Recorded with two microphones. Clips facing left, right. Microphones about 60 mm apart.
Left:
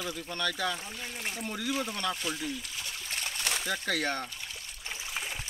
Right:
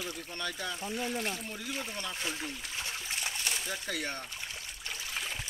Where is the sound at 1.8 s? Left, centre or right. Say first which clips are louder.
Left 6 dB; left.